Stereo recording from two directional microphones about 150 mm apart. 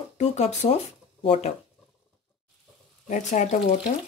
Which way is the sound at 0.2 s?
45° left (ahead or behind).